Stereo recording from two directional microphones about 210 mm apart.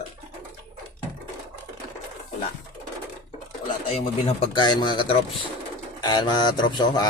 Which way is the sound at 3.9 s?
30° left (ahead or behind).